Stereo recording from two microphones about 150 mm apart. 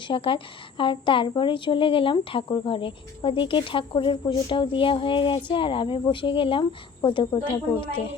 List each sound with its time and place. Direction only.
0.1 s a woman's voice: 35° left (ahead or behind)